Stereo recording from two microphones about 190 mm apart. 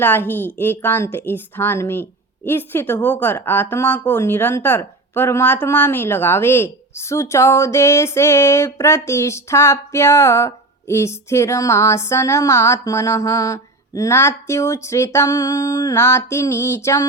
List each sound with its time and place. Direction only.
0.0 s a woman's voice: 10° left (ahead or behind)